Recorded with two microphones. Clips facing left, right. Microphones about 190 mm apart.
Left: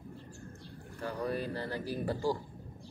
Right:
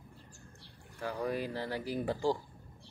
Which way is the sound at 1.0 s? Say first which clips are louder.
Even; 10° right (ahead or behind).